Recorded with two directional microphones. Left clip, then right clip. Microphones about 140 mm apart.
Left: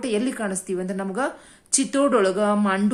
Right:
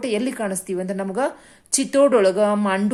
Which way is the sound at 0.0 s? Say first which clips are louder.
Right 2 dB; 30° right (ahead or behind).